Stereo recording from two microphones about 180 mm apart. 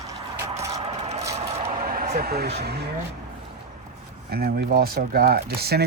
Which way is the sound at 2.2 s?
60° right (ahead or behind).